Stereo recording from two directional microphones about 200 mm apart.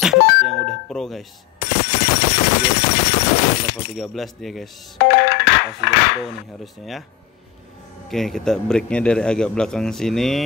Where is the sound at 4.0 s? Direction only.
Centre (ahead or behind).